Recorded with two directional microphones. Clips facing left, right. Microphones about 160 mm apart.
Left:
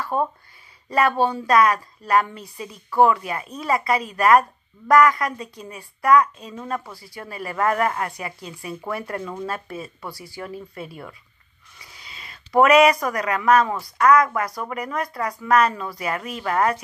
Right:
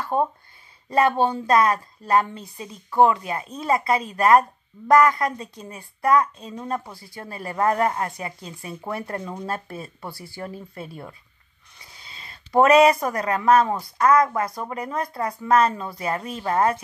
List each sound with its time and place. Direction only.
0.0 s a woman's voice: 25° right (ahead or behind)